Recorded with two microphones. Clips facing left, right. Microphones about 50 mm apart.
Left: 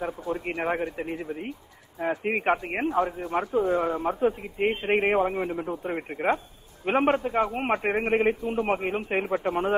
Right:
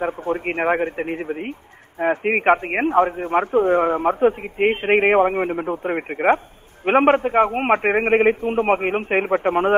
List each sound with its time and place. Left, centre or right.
0.0 s a man's voice: right